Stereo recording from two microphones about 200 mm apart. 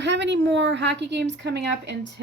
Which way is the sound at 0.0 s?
60° right (ahead or behind).